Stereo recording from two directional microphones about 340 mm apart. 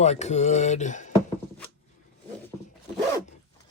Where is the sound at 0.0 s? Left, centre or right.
Centre.